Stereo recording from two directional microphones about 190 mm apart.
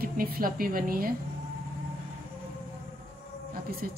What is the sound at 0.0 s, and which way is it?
A woman's voice, 50° right (ahead or behind).